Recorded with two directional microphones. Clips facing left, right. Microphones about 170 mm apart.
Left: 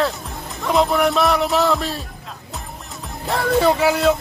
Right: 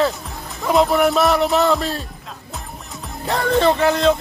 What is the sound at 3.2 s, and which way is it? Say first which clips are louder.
Speech: even; centre (ahead or behind).